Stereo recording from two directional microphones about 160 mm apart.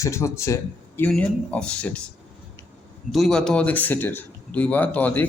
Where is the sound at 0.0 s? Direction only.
15° left (ahead or behind).